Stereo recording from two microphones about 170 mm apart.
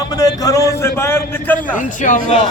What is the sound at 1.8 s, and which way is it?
Speech, 50° left (ahead or behind).